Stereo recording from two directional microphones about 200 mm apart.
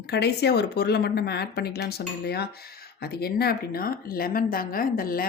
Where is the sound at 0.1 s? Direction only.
55° left (ahead or behind).